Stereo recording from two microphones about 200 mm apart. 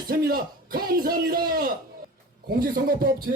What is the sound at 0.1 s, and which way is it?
A man's voice, 50° right (ahead or behind).